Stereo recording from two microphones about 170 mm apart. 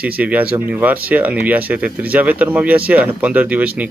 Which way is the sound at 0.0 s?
10° right (ahead or behind).